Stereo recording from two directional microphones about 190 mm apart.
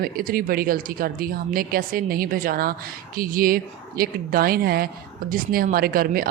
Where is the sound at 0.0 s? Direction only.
50° right (ahead or behind).